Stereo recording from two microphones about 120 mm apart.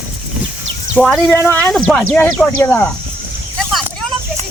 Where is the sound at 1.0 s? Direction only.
5° left (ahead or behind).